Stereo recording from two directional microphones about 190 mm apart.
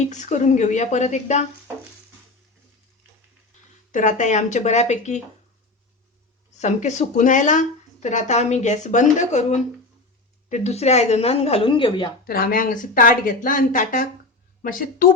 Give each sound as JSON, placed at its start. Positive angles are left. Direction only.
{"t": 0.0, "sound": "speech", "side_deg": 40}
{"t": 3.9, "sound": "speech", "side_deg": 40}
{"t": 6.6, "sound": "speech", "side_deg": 40}
{"t": 12.2, "sound": "speech", "side_deg": 50}